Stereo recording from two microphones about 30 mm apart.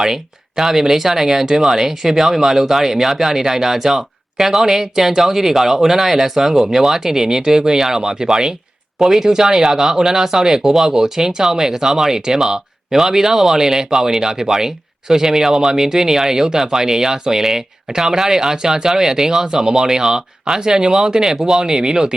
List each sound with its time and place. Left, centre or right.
0.0 s speech: centre
7.8 s speech: centre
8.0 s speech: right
9.0 s speech: centre; by 22.1 s right